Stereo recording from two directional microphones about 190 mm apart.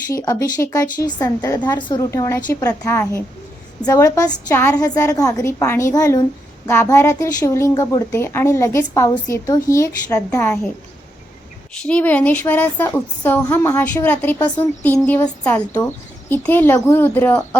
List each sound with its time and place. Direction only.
0.1 s a woman's voice: 15° left (ahead or behind)
11.8 s a woman's voice: 5° left (ahead or behind)